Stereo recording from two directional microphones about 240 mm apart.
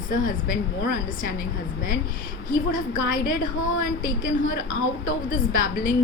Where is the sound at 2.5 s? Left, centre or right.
Left.